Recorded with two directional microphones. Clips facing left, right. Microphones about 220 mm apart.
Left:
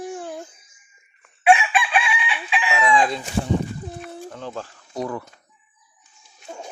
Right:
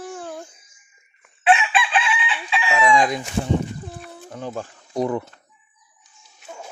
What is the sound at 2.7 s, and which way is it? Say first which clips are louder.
Chicken: right 2 dB; 15° right (ahead or behind).